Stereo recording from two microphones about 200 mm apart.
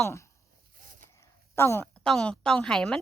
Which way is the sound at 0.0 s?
15° left (ahead or behind).